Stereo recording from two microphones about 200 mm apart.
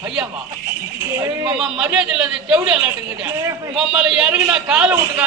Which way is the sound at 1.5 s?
Centre (ahead or behind).